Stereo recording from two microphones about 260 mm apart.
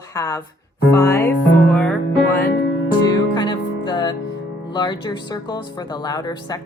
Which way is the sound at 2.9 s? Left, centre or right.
Centre.